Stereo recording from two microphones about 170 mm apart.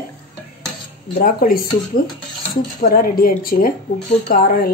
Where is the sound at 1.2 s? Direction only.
60° left (ahead or behind).